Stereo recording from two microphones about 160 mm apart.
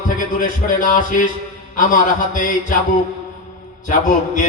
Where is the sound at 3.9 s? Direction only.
55° left (ahead or behind).